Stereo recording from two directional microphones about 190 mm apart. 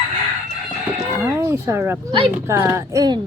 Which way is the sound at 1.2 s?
15° right (ahead or behind).